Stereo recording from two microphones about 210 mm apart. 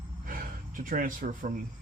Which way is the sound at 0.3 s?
40° right (ahead or behind).